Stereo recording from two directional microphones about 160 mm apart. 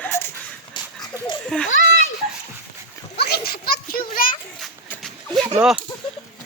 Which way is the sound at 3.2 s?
80° left.